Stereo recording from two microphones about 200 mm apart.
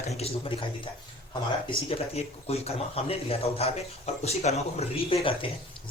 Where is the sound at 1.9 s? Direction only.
30° left (ahead or behind).